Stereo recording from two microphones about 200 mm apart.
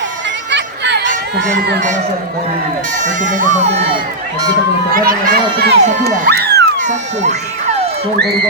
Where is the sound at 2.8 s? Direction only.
40° right (ahead or behind).